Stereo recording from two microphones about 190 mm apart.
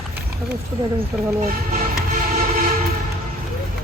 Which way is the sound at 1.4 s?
45° right (ahead or behind).